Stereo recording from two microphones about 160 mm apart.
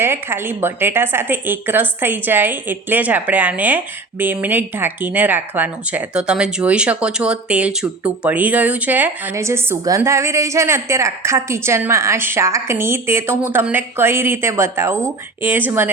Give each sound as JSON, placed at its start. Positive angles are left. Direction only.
{"t": 0.0, "sound": "speech", "side_deg": -15}